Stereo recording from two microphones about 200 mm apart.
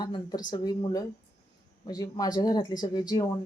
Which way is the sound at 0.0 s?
20° left (ahead or behind).